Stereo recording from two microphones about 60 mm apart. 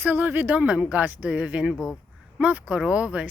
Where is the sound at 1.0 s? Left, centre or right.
Right.